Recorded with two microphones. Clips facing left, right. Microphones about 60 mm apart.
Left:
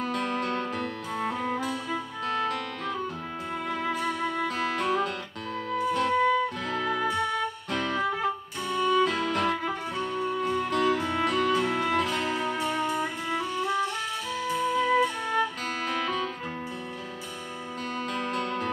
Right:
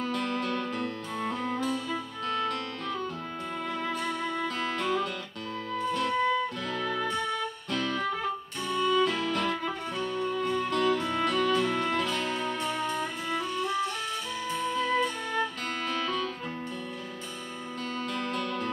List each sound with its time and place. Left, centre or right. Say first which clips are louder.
0.0 s music: left 2 dB; centre
8.6 s music: left 2 dB; centre
18.1 s music: left 3 dB; centre